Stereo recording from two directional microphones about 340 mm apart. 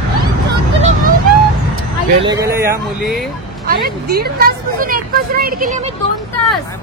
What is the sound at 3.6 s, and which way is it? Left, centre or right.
Speech, right.